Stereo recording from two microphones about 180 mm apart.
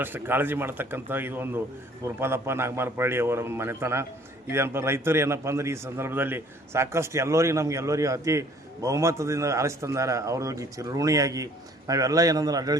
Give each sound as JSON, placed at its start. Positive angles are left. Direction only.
{"t": 0.0, "sound": "a man's voice", "side_deg": -10}